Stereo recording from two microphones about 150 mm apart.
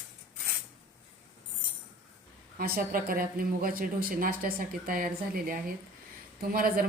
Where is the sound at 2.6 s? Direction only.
80° right.